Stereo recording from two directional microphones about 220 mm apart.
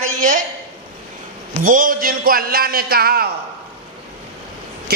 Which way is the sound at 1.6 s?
40° right (ahead or behind).